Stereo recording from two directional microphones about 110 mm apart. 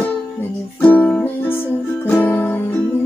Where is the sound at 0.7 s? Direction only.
15° left (ahead or behind).